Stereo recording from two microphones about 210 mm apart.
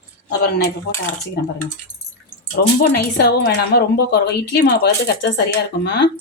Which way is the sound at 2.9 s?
50° left (ahead or behind).